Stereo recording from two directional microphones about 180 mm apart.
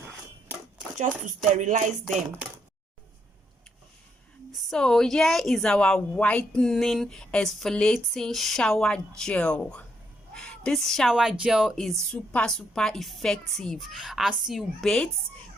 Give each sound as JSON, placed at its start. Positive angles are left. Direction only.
{"t": 1.5, "sound": "music", "side_deg": -45}
{"t": 4.7, "sound": "speech", "side_deg": 0}